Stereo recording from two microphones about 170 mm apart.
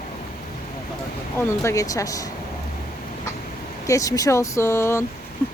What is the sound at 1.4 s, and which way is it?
Speech, 15° left (ahead or behind).